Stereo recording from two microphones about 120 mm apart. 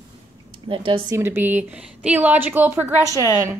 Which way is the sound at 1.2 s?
20° right (ahead or behind).